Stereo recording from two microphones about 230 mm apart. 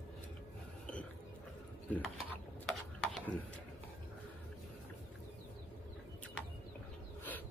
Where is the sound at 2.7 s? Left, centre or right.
Centre.